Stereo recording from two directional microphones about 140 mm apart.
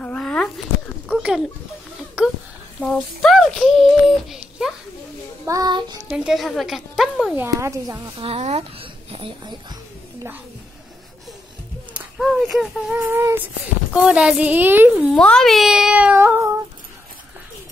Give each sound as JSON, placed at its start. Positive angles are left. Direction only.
{"t": 0.0, "sound": "a sound", "side_deg": 10}
{"t": 1.0, "sound": "speech", "side_deg": -5}
{"t": 2.8, "sound": "a child's voice", "side_deg": 0}
{"t": 5.5, "sound": "a child's voice", "side_deg": -30}
{"t": 6.0, "sound": "a child's voice", "side_deg": -5}
{"t": 7.3, "sound": "a child's voice", "side_deg": -20}
{"t": 8.2, "sound": "a child's voice", "side_deg": -45}
{"t": 11.9, "sound": "speech", "side_deg": -5}
{"t": 15.0, "sound": "a child's voice", "side_deg": 0}